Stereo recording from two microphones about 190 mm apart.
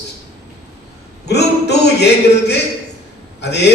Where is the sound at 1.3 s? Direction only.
60° left (ahead or behind).